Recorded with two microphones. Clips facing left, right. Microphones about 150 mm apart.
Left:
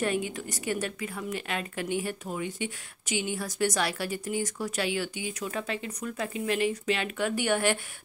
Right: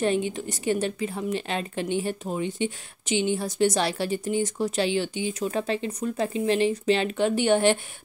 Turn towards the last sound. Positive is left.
turn(degrees=-25)  # may be behind; listen again after turning